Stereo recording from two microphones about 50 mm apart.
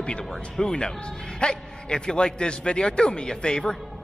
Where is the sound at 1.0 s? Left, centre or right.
Centre.